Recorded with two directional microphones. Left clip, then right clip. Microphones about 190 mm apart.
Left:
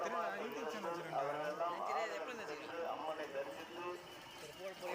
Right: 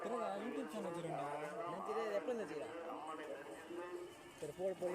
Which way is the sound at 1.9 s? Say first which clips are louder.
Even; 40° right (ahead or behind).